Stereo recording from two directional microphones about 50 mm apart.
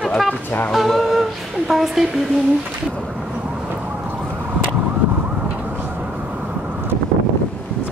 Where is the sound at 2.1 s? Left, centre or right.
Centre.